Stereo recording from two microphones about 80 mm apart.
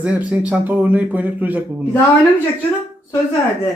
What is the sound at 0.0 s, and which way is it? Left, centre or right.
Speech, centre.